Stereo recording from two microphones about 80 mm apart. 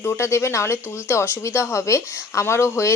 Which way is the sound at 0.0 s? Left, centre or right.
Left.